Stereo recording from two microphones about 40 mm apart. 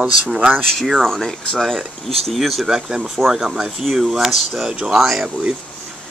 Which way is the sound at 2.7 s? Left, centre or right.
Centre.